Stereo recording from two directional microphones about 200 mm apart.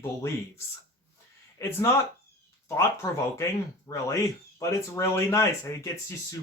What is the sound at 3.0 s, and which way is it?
Speech, 15° left (ahead or behind).